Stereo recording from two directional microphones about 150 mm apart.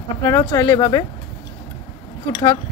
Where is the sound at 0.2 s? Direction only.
20° left (ahead or behind).